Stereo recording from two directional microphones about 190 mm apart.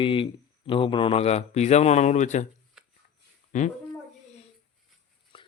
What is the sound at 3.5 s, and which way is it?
Speech, 40° left (ahead or behind).